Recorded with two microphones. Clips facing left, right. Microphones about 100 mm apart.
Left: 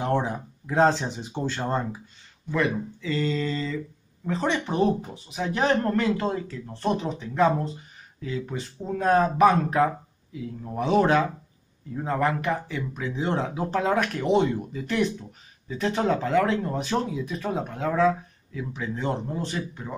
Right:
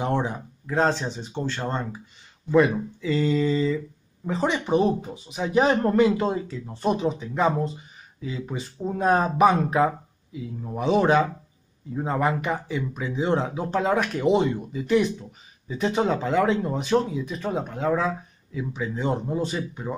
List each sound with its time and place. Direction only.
0.0 s speech: centre (ahead or behind)
2.5 s speech: 20° right (ahead or behind)